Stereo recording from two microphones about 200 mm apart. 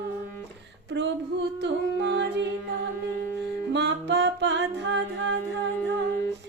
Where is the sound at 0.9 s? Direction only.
60° right (ahead or behind).